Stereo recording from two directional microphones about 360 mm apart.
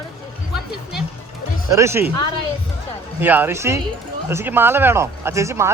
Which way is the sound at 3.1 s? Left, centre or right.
Centre.